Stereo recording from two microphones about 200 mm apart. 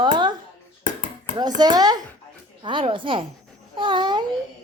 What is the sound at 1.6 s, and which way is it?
A woman's voice, 20° right (ahead or behind).